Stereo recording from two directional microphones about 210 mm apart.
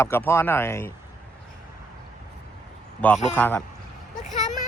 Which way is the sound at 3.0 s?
10° left (ahead or behind).